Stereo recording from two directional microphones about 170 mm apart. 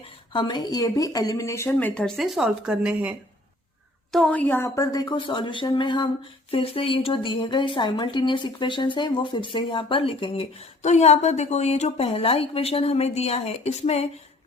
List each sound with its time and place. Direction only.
0.3 s speech: 25° left (ahead or behind); by 3.2 s 5° right (ahead or behind)
4.1 s a woman's voice: 5° left (ahead or behind); by 10.4 s 30° left (ahead or behind)
10.8 s a woman's voice: 40° left (ahead or behind)